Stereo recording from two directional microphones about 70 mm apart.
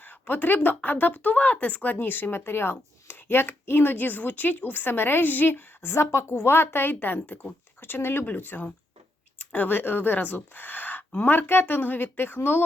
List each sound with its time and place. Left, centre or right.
0.0 s speech: left